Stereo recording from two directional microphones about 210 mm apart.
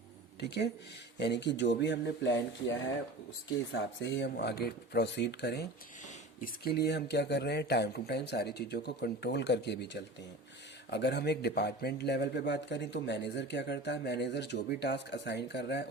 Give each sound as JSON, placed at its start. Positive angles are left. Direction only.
{"t": 0.3, "sound": "speech", "side_deg": 50}
{"t": 3.7, "sound": "speech", "side_deg": 60}